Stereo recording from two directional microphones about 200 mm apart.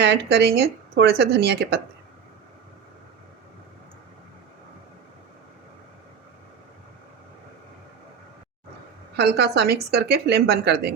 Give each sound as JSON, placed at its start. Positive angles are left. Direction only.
{"t": 0.0, "sound": "speech", "side_deg": -55}
{"t": 9.1, "sound": "speech", "side_deg": -55}